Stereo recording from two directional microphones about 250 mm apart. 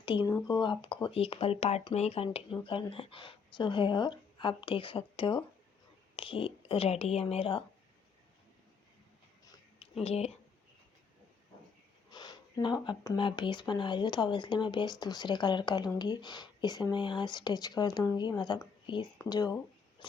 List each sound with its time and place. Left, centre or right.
0.0 s speech: centre
9.4 s a sound: centre
10.0 s speech: left
12.1 s speech: centre